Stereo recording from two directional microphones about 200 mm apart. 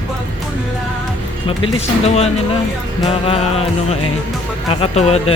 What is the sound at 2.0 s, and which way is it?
Speech, 30° left (ahead or behind).